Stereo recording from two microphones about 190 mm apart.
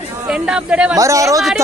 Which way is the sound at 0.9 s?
15° right (ahead or behind).